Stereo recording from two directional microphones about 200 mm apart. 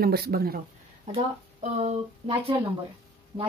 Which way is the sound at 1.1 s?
35° right (ahead or behind).